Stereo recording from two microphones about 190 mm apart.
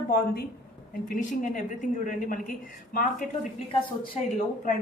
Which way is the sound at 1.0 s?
45° left (ahead or behind).